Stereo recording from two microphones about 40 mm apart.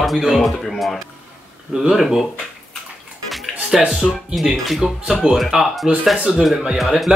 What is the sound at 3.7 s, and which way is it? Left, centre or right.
Speech, centre.